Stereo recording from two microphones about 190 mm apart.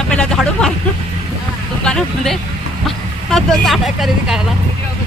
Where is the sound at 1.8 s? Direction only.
5° left (ahead or behind).